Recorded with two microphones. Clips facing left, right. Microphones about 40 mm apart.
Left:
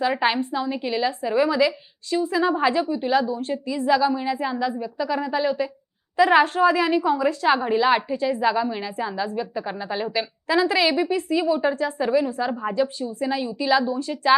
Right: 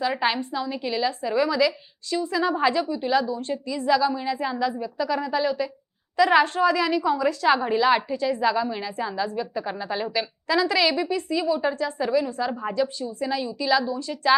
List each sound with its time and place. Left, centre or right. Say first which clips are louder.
0.1 s a woman's voice: left 3 dB; centre
3.1 s a woman's voice: even; left
12.2 s a woman's voice: left 2 dB; centre
12.7 s a woman's voice: left 2 dB; centre